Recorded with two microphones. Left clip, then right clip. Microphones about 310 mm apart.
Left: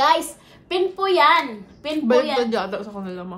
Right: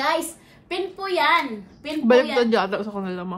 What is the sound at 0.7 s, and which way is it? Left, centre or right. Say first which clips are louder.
A child's voice: left 6 dB; centre.